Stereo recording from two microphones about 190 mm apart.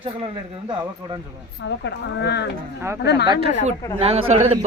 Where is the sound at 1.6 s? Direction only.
70° left (ahead or behind).